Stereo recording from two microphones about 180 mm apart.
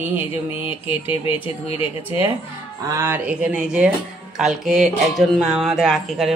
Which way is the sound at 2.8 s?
15° right (ahead or behind).